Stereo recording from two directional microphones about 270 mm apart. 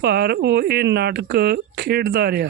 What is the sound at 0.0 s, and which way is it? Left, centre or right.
Speech, right.